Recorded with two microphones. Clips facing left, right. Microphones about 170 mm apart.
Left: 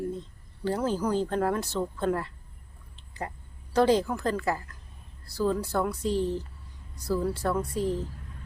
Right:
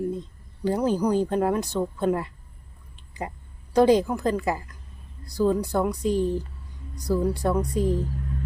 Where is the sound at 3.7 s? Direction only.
15° right (ahead or behind).